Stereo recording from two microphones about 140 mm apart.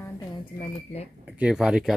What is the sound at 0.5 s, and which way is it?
Speech, 35° left (ahead or behind).